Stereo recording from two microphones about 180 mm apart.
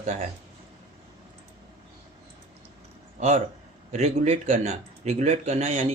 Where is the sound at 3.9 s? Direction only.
35° right (ahead or behind).